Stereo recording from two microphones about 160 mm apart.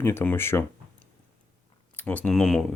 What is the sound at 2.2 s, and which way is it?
Speech, 5° left (ahead or behind).